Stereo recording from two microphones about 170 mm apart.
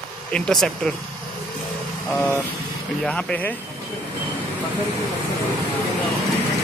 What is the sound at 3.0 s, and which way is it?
Speech, 5° left (ahead or behind).